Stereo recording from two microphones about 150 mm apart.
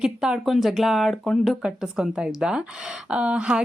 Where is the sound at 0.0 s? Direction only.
5° right (ahead or behind).